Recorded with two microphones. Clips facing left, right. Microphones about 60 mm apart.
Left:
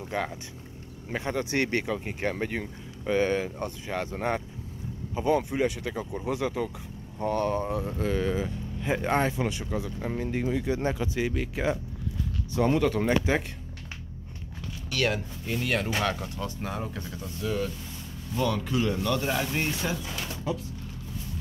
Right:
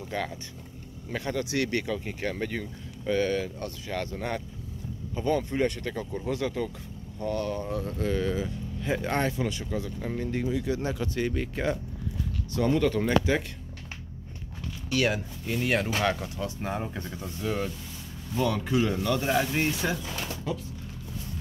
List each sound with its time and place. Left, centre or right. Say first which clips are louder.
0.0 s speech: left 1 dB; centre
7.2 s speech: left 3 dB; left
11.0 s speech: even; centre
12.5 s speech: left 1 dB; centre
14.9 s speech: right 1 dB; centre
16.6 s speech: right 1 dB; right
18.3 s speech: right 1 dB; centre